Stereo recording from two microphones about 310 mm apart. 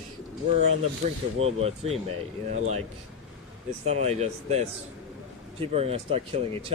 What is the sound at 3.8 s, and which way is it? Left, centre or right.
Speech, right.